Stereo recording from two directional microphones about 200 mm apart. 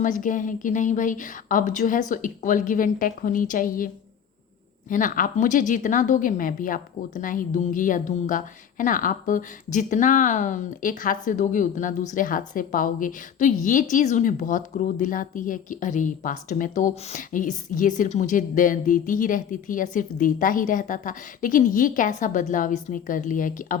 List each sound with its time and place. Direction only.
0.0 s speech: 40° left (ahead or behind)
4.9 s speech: 40° left (ahead or behind)